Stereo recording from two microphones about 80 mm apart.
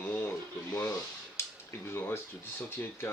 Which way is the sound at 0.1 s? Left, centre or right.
Left.